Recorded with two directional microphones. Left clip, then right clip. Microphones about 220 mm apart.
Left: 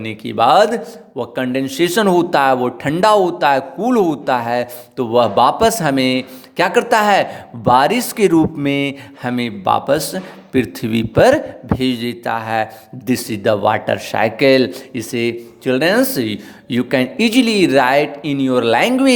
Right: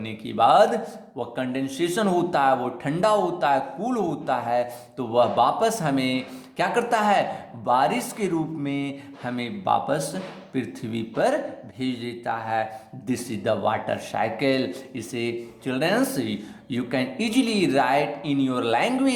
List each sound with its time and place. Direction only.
0.0 s a man's voice: 40° left (ahead or behind)